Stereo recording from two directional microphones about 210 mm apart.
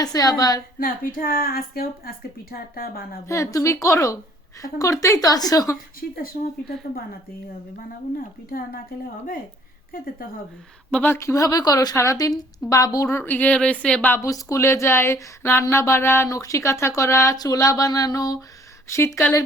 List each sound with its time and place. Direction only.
0.0 s a woman's voice: 15° left (ahead or behind)
0.8 s a woman's voice: 40° left (ahead or behind)
3.2 s a woman's voice: 15° left (ahead or behind)
6.0 s a woman's voice: 45° left (ahead or behind)
8.4 s a woman's voice: 45° left (ahead or behind)
10.9 s a woman's voice: 10° left (ahead or behind)